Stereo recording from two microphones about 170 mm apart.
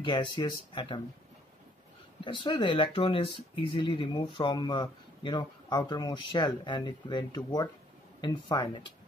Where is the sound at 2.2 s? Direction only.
30° left (ahead or behind).